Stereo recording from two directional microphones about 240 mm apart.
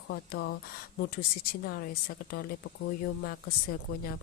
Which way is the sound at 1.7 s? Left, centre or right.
Left.